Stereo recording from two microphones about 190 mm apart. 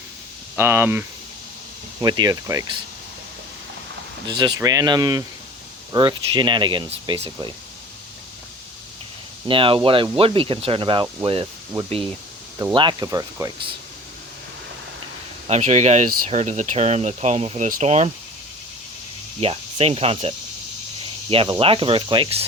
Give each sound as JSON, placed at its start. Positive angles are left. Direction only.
{"t": 0.5, "sound": "speech", "side_deg": -15}
{"t": 4.3, "sound": "speech", "side_deg": -25}
{"t": 9.5, "sound": "speech", "side_deg": -30}
{"t": 12.7, "sound": "speech", "side_deg": -25}
{"t": 15.4, "sound": "speech", "side_deg": -35}
{"t": 19.4, "sound": "speech", "side_deg": -30}